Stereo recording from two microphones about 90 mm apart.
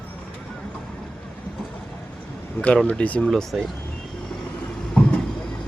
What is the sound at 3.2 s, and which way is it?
Speech, 5° left (ahead or behind).